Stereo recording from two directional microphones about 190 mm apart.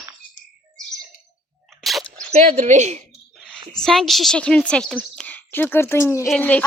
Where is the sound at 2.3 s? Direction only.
40° right (ahead or behind).